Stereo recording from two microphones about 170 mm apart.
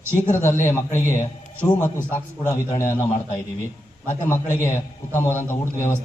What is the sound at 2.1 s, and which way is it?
A man's voice, 10° left (ahead or behind).